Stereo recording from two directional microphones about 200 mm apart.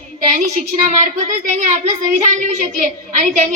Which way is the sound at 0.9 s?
35° right (ahead or behind).